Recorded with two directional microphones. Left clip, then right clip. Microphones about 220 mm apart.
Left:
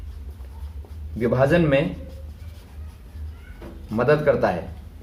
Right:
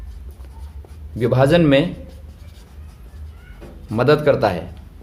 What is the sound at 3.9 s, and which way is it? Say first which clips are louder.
Speech: right 3 dB; 45° right (ahead or behind).